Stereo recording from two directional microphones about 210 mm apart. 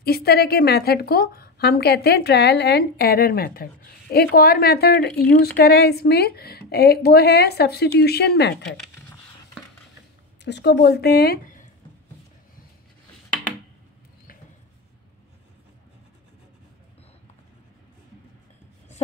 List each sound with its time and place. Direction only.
0.0 s a woman's voice: 50° left (ahead or behind)
10.4 s speech: 55° left (ahead or behind)